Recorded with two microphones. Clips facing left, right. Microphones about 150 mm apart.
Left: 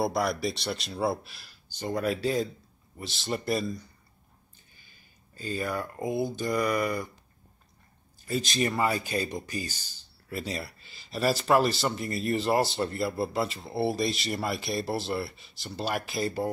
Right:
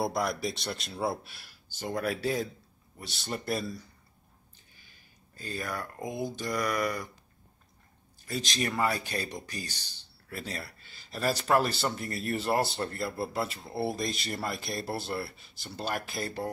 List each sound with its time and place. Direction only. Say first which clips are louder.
0.0 s speech: left 3 dB; centre (ahead or behind)
5.4 s speech: left 5 dB; 5° left (ahead or behind)
8.3 s speech: left 4 dB; centre (ahead or behind)